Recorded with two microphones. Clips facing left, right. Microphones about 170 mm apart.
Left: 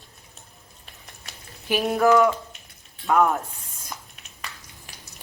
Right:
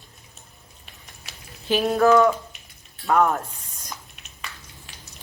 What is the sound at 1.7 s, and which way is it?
Speech, 15° left (ahead or behind).